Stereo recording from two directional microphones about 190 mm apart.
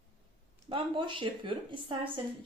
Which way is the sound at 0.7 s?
25° right (ahead or behind).